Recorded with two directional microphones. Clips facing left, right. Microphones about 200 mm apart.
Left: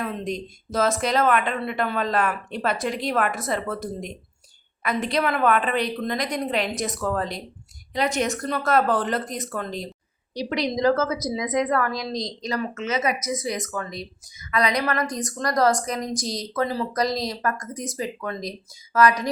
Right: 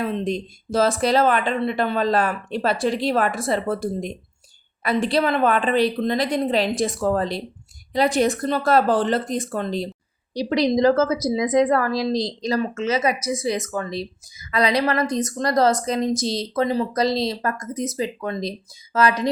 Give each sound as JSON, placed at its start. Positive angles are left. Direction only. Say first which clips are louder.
{"t": 0.0, "sound": "a woman's voice", "louder": "right 4 dB", "side_deg": -30}